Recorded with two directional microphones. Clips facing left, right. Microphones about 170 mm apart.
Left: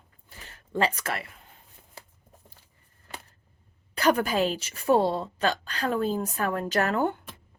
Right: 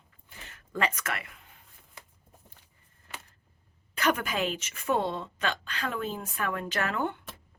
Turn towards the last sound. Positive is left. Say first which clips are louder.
# left 5 dB
turn(degrees=40)  # may be behind; listen again after turning